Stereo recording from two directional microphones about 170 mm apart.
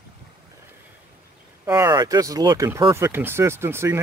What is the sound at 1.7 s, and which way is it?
Speech, 15° right (ahead or behind).